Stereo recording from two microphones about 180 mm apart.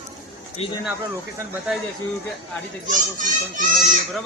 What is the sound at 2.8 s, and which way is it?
Speech, 45° right (ahead or behind).